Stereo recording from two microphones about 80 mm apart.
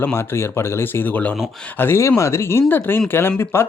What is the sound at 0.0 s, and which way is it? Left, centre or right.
A man's voice, left.